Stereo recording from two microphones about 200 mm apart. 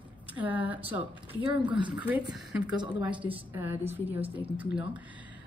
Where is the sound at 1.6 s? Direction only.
25° right (ahead or behind).